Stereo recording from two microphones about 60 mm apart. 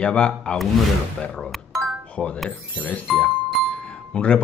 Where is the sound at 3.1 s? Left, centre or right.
Centre.